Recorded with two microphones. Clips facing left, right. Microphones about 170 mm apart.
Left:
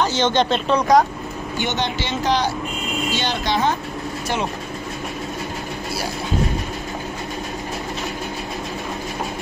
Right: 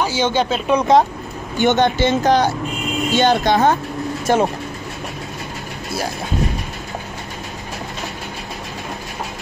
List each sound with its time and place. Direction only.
0.0 s speech: 10° right (ahead or behind)
0.7 s speech: 25° right (ahead or behind)
1.6 s speech: 50° right (ahead or behind)